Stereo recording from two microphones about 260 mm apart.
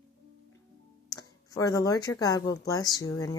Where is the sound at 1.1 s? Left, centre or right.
Centre.